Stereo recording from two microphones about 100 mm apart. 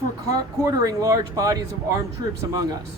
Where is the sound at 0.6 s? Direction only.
35° right (ahead or behind).